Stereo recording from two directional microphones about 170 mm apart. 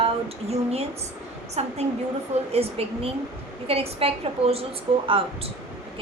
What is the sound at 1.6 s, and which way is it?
A woman's voice, 40° right (ahead or behind).